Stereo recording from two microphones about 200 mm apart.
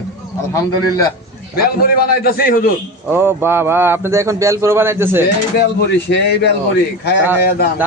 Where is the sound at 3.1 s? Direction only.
10° right (ahead or behind).